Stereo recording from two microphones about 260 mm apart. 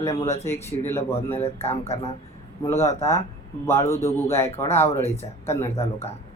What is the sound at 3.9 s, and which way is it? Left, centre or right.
Speech, centre.